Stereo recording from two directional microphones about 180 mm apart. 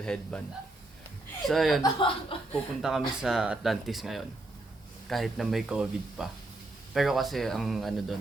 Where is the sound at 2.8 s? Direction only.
Centre (ahead or behind).